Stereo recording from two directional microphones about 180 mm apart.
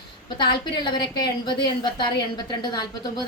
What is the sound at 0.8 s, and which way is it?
A woman's voice, 25° left (ahead or behind).